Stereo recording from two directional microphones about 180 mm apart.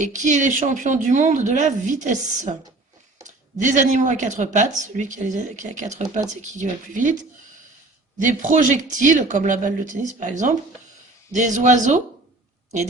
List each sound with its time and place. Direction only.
0.0 s speech: 40° right (ahead or behind)